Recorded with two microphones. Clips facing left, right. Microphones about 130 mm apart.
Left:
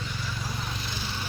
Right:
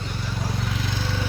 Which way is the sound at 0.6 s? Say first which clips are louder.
Right 7 dB; 85° right.